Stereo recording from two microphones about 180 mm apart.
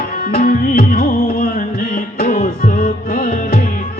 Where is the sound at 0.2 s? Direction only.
55° left (ahead or behind).